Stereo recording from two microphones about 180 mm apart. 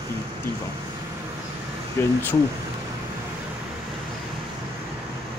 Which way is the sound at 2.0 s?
15° left (ahead or behind).